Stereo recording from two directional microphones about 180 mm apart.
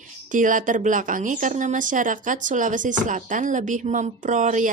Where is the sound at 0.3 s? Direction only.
45° right (ahead or behind).